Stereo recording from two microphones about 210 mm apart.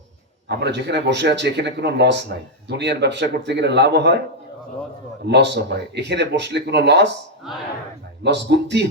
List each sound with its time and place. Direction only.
0.4 s speech: 55° right (ahead or behind)
5.2 s speech: 55° right (ahead or behind)
8.2 s speech: 55° right (ahead or behind)